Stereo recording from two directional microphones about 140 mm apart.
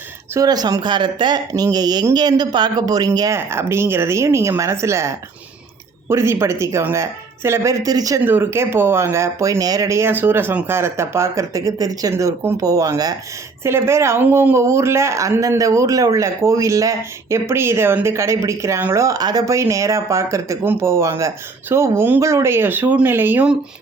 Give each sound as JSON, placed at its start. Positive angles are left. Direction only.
{"t": 0.3, "sound": "speech", "side_deg": -30}
{"t": 8.2, "sound": "speech", "side_deg": -15}